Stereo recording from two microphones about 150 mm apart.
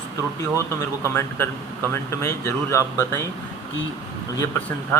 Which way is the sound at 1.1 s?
15° left (ahead or behind).